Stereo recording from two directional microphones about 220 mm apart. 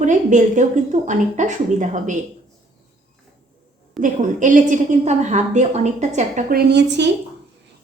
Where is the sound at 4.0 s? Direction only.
35° right (ahead or behind); by 7.1 s 50° right (ahead or behind).